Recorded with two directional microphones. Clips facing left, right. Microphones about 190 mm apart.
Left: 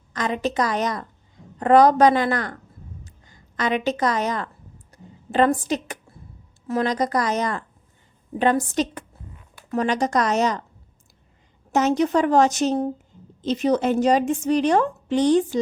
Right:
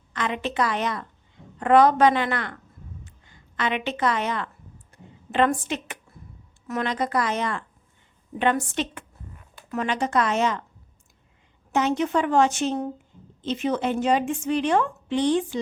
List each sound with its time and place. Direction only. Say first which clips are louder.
0.1 s a woman's voice: left 4 dB; 40° left (ahead or behind)
3.0 s a sound: left 1 dB; 40° left (ahead or behind)
5.3 s a woman's voice: left 3 dB; 40° left (ahead or behind)
11.7 s a woman's voice: left 3 dB; 40° left (ahead or behind)